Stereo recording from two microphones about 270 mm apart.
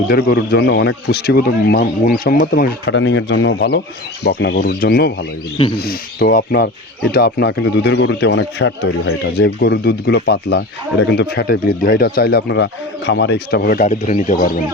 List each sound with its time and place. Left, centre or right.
0.1 s speech: left